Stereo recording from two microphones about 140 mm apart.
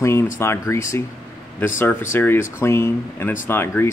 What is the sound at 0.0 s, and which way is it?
Speech, 20° left (ahead or behind).